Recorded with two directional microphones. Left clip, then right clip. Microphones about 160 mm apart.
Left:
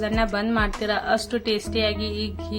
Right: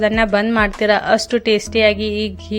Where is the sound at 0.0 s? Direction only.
45° right (ahead or behind).